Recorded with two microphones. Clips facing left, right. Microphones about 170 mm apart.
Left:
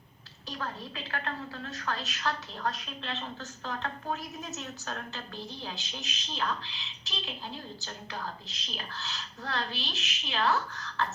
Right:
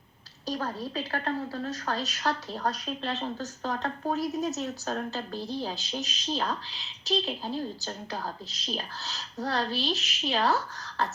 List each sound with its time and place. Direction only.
0.4 s a woman's voice: 40° right (ahead or behind)